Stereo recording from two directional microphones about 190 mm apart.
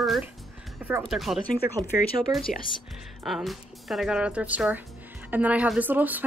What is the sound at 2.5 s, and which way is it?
Speech, 45° left (ahead or behind).